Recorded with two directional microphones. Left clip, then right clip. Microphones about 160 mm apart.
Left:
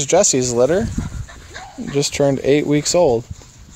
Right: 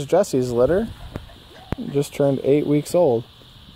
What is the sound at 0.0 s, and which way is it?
Speech, 5° right (ahead or behind).